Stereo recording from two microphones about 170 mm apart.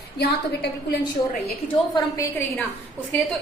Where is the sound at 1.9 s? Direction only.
20° left (ahead or behind).